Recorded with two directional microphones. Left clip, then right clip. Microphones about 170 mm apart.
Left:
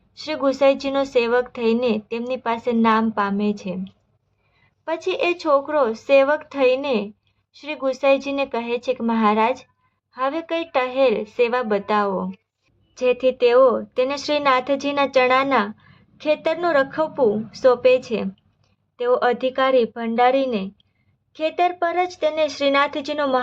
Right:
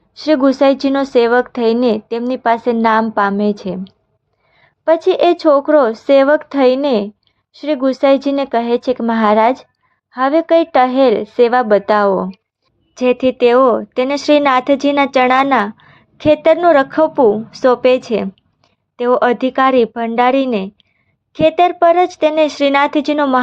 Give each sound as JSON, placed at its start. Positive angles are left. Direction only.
{"t": 0.1, "sound": "speech", "side_deg": -35}
{"t": 4.9, "sound": "speech", "side_deg": -40}